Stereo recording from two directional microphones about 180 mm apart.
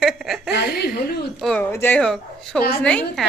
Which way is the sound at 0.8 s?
60° left (ahead or behind).